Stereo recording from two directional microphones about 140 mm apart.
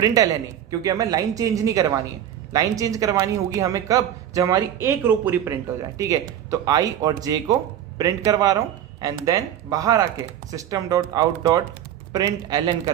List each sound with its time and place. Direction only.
0.0 s speech: 25° right (ahead or behind)